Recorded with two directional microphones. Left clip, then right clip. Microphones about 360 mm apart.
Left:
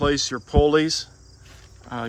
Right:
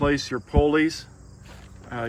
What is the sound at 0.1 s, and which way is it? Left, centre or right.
Speech, centre.